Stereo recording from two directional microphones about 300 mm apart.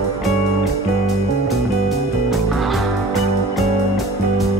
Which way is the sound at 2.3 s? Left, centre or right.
Centre.